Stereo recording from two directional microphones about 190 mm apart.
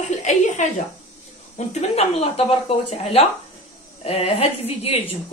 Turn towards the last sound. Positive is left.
turn(degrees=30)  # may be behind; listen again after turning